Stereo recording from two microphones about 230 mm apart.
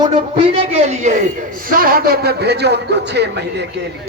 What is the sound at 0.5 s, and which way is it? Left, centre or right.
A man's voice, right.